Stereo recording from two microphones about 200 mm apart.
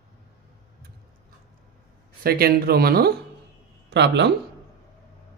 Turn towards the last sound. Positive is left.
turn(degrees=-60)  # may be behind; listen again after turning